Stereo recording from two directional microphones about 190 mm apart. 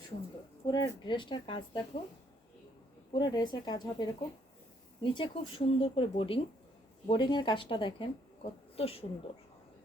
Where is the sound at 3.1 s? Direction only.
20° left (ahead or behind).